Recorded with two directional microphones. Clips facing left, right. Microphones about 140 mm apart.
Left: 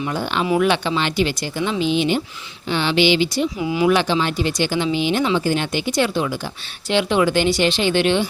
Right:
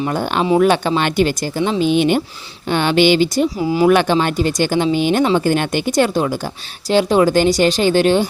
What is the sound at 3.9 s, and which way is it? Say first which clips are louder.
Speech: right 4 dB; 50° right (ahead or behind).